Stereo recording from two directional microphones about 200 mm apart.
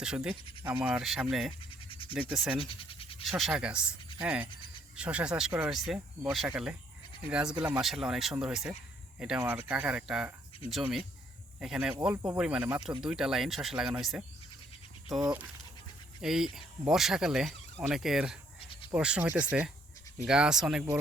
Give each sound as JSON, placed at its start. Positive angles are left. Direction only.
{"t": 0.0, "sound": "speech", "side_deg": -5}
{"t": 1.9, "sound": "a sound", "side_deg": 25}
{"t": 2.3, "sound": "speech", "side_deg": 0}
{"t": 2.6, "sound": "scratch", "side_deg": 25}
{"t": 3.2, "sound": "speech", "side_deg": 0}
{"t": 18.6, "sound": "cricket", "side_deg": 25}
{"t": 18.9, "sound": "speech", "side_deg": -5}